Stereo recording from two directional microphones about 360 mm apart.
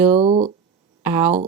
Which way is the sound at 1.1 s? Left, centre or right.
Centre.